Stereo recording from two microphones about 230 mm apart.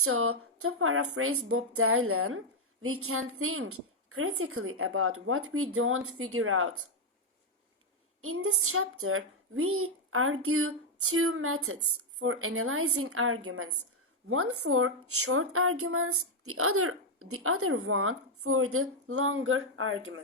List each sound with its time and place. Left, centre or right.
0.0 s a woman's voice: right
8.2 s a woman's voice: right